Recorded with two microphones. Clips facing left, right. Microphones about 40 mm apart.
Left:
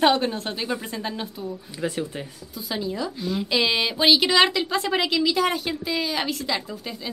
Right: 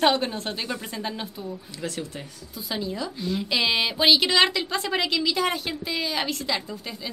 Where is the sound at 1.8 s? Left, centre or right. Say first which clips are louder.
Left 5 dB; centre.